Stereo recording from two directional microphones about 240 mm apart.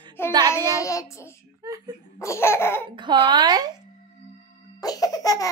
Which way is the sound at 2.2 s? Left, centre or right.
Centre.